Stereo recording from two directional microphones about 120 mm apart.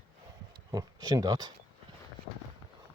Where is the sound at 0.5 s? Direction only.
35° right (ahead or behind).